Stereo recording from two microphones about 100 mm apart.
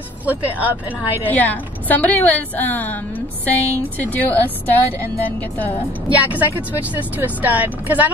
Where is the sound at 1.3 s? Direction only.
15° left (ahead or behind).